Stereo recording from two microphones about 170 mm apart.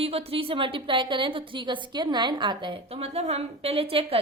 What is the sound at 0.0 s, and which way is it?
A woman's voice, 35° right (ahead or behind).